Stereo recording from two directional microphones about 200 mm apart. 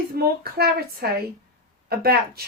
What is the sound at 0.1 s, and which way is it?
Speech, 50° right (ahead or behind).